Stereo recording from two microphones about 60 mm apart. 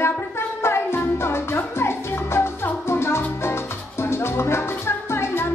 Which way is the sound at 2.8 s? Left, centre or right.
Left.